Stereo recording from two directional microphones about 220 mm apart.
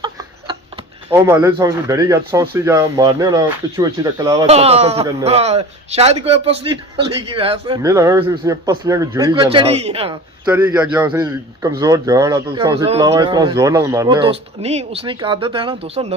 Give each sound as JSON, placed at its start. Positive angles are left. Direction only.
{"t": 1.1, "sound": "speech", "side_deg": -15}
{"t": 4.4, "sound": "a man's voice", "side_deg": -30}
{"t": 7.8, "sound": "speech", "side_deg": -15}
{"t": 10.4, "sound": "a man's voice", "side_deg": -10}